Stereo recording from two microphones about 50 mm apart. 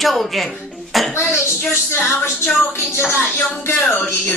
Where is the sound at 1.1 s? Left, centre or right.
Left.